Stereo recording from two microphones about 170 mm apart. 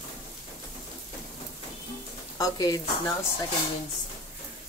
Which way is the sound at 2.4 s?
20° left (ahead or behind).